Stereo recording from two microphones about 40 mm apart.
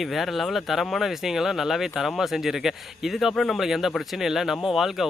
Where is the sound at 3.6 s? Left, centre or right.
Centre.